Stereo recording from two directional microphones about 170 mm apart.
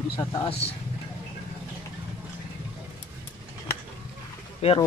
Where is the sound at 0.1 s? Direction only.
25° left (ahead or behind).